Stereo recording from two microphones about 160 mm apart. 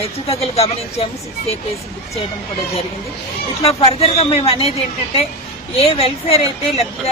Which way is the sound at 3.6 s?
35° left (ahead or behind).